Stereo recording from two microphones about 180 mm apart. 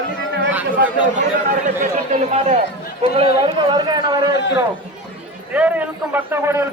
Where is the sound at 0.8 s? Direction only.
45° right (ahead or behind); by 4.3 s 25° right (ahead or behind).